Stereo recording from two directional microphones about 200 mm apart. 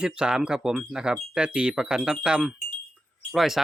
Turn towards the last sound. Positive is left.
turn(degrees=0)  # may be behind; listen again after turning